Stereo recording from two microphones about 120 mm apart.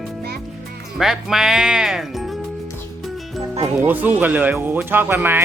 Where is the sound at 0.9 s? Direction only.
5° right (ahead or behind).